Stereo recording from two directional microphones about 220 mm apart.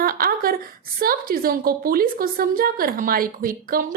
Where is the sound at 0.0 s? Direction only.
40° right (ahead or behind).